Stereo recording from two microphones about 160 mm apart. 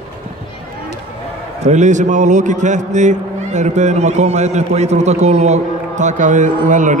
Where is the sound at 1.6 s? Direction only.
45° right (ahead or behind).